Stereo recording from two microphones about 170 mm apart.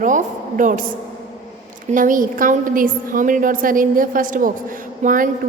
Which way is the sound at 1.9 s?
50° right (ahead or behind).